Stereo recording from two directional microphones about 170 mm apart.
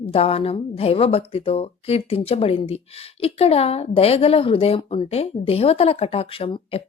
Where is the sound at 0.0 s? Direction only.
35° left (ahead or behind).